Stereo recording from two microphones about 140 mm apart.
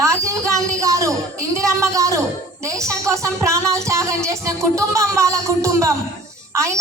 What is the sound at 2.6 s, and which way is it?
Speech, 20° right (ahead or behind).